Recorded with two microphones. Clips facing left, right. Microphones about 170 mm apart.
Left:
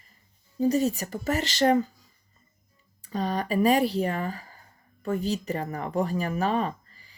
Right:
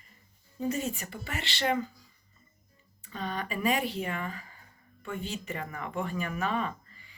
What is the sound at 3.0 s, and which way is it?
Speech, 35° left (ahead or behind).